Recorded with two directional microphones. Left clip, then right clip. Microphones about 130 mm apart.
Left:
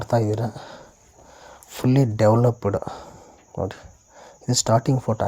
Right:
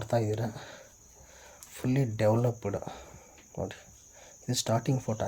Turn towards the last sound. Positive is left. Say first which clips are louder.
# left 10 dB
turn(degrees=35)  # may be behind; listen again after turning